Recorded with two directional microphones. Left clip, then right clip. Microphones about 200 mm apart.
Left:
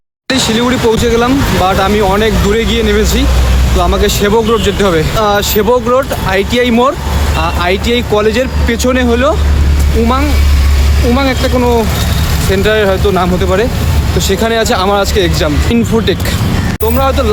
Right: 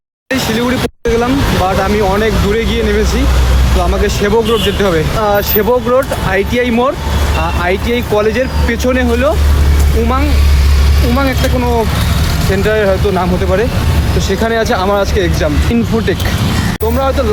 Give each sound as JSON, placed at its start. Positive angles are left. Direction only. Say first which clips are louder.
{"t": 0.3, "sound": "speech", "louder": "left 2 dB", "side_deg": 20}
{"t": 12.6, "sound": "speech", "louder": "left 1 dB", "side_deg": 20}